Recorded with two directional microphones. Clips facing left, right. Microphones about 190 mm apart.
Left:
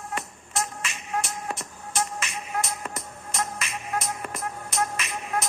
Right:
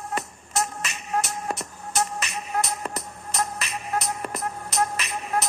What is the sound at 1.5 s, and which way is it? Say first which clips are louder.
Music: right 3 dB; 40° right (ahead or behind).